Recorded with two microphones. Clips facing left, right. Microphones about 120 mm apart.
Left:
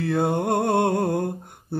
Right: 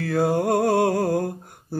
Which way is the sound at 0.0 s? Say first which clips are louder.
Right 1 dB; 25° left (ahead or behind).